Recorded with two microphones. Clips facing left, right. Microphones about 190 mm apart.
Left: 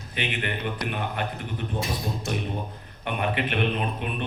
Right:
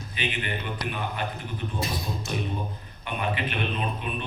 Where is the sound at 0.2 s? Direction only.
60° left (ahead or behind).